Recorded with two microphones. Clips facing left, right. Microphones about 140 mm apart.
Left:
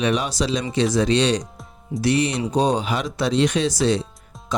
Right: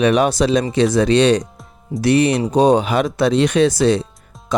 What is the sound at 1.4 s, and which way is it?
Music, centre (ahead or behind).